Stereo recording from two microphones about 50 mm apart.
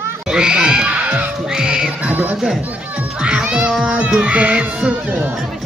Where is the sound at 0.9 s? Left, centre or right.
Right.